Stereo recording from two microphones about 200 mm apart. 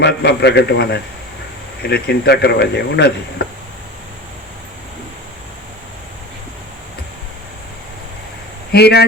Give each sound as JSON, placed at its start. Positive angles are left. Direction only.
{"t": 0.0, "sound": "speech", "side_deg": 55}
{"t": 8.7, "sound": "speech", "side_deg": 55}